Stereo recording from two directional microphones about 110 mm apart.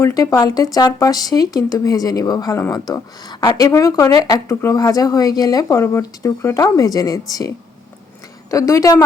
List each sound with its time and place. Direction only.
0.0 s speech: 35° left (ahead or behind)